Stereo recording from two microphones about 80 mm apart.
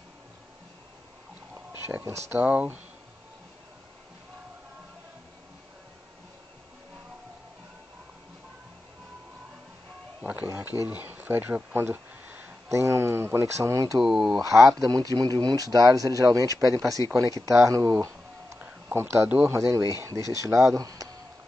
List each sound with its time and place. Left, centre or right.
2.0 s speech: right
2.4 s speech: centre
10.4 s speech: right
10.9 s speech: right
12.6 s speech: right
13.9 s speech: centre
14.4 s speech: right
14.9 s speech: right
18.6 s a sound: right
19.4 s speech: right